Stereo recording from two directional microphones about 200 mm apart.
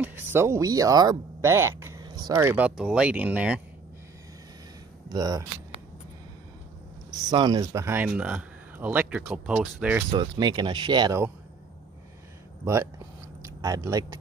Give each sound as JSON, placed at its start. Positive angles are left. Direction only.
{"t": 0.0, "sound": "speech", "side_deg": -10}
{"t": 5.1, "sound": "speech", "side_deg": -15}
{"t": 7.2, "sound": "speech", "side_deg": -20}
{"t": 10.3, "sound": "speech", "side_deg": -20}
{"t": 13.6, "sound": "speech", "side_deg": -15}